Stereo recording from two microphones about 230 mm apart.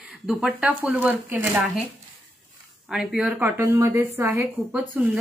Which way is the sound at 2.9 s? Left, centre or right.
Centre.